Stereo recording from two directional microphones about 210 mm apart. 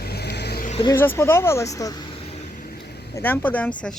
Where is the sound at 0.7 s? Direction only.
20° left (ahead or behind).